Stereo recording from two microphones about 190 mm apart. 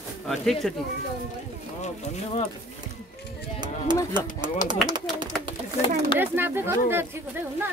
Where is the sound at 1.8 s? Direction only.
35° left (ahead or behind).